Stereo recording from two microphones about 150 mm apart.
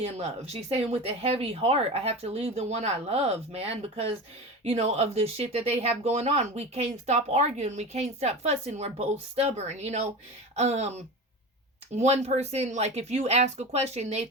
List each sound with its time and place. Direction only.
0.0 s speech: 45° right (ahead or behind)